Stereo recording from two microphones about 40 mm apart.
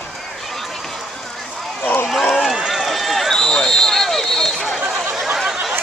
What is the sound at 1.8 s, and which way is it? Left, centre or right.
Run, left.